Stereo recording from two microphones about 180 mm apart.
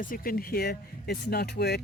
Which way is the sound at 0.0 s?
50° left (ahead or behind).